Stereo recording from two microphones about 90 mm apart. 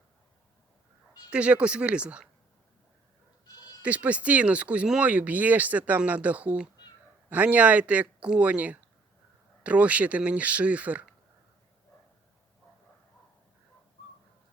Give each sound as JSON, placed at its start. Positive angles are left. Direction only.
{"t": 1.3, "sound": "speech", "side_deg": -10}
{"t": 3.4, "sound": "bleat", "side_deg": 45}
{"t": 3.8, "sound": "speech", "side_deg": -15}